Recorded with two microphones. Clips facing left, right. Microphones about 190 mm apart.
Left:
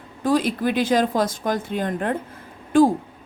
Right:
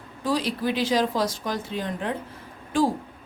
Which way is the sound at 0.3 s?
50° left (ahead or behind).